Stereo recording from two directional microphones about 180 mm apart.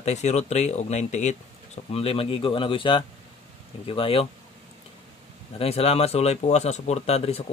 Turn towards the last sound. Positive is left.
turn(degrees=35)  # may be behind; listen again after turning